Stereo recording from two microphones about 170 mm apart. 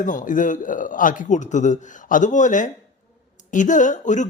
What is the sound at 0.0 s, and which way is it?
Speech, 50° left (ahead or behind).